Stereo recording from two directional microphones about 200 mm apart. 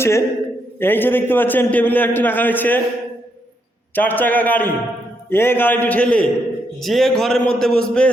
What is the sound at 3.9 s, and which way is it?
A man's voice, 10° left (ahead or behind).